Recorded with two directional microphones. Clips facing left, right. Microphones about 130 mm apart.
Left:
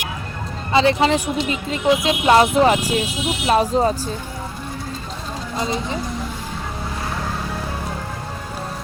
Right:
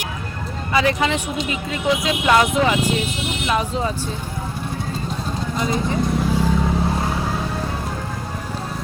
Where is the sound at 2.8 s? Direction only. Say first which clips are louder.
Even; 10° left (ahead or behind).